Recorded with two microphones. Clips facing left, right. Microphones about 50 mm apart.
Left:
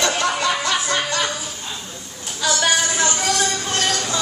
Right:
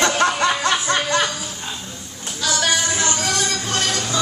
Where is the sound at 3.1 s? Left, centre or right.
Centre.